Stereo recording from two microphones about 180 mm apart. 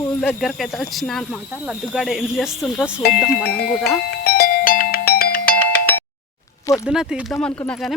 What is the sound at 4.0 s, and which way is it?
Music, 55° left (ahead or behind).